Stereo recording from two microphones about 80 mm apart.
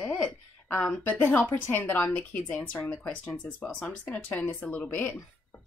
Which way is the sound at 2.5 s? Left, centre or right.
Centre.